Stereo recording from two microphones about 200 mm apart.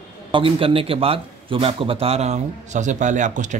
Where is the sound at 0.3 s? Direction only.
25° right (ahead or behind).